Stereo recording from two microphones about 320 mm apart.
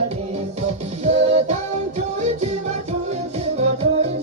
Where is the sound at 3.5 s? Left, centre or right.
Centre.